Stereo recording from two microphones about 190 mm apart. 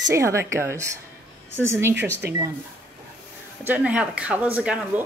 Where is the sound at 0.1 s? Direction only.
15° right (ahead or behind).